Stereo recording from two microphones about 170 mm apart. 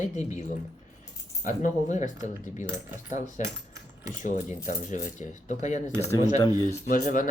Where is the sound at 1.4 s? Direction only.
45° left (ahead or behind).